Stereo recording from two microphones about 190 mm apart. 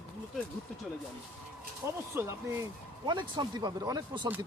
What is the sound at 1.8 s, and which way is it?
Speech, 15° right (ahead or behind).